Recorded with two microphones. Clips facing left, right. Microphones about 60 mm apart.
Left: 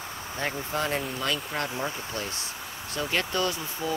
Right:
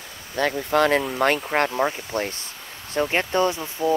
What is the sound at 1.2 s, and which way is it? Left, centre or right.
Speech, right.